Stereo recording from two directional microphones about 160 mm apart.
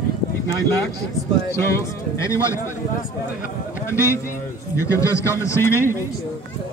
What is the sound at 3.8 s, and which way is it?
A man's voice, 15° left (ahead or behind).